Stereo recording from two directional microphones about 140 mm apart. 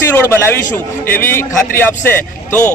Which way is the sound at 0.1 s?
15° left (ahead or behind).